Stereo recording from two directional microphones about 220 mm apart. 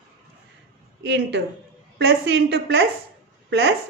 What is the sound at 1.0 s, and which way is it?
A woman's voice, 50° right (ahead or behind).